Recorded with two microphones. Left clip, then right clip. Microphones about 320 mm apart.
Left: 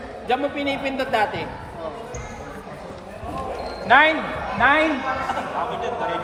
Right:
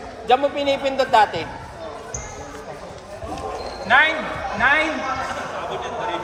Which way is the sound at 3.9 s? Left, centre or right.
Centre.